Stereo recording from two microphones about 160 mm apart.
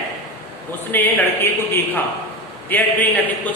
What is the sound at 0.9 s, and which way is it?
A man's voice, 15° left (ahead or behind).